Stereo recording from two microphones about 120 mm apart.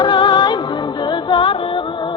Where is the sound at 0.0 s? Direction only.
40° left (ahead or behind).